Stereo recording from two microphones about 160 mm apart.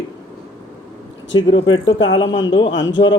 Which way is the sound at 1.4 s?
30° left (ahead or behind).